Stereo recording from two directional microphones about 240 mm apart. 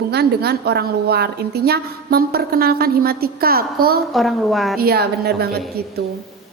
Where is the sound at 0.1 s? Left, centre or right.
Right.